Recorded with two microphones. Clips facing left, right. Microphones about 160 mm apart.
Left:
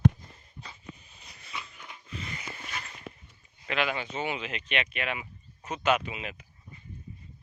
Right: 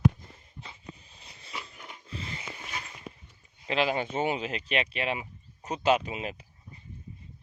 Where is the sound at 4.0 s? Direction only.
45° right (ahead or behind).